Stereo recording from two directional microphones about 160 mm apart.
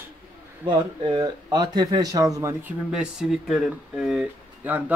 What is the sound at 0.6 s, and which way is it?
Speech, 30° right (ahead or behind).